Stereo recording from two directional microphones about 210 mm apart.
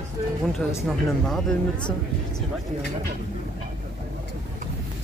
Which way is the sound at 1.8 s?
20° left (ahead or behind).